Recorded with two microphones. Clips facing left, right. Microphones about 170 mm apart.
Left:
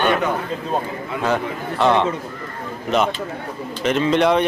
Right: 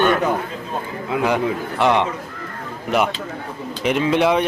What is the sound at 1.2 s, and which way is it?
Speech, 15° right (ahead or behind).